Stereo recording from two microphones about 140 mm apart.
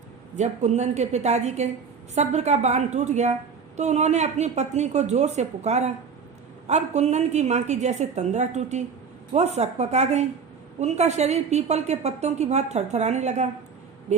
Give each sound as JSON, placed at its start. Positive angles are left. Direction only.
{"t": 0.3, "sound": "a woman's voice", "side_deg": -55}